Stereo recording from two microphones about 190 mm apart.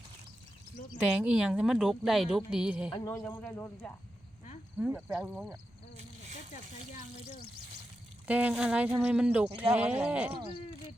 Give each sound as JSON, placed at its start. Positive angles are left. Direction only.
{"t": 1.0, "sound": "a woman's voice", "side_deg": -5}
{"t": 2.9, "sound": "speech", "side_deg": 20}
{"t": 4.8, "sound": "speech", "side_deg": -5}
{"t": 6.5, "sound": "frying", "side_deg": 40}
{"t": 8.3, "sound": "speech", "side_deg": -5}